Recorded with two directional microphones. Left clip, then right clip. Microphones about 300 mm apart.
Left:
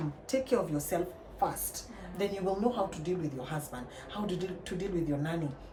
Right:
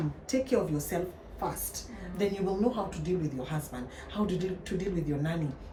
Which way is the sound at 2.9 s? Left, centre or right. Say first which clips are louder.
Right 2 dB; centre.